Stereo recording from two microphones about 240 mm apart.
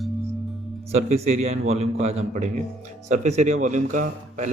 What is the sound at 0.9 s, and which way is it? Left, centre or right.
A man's voice, right.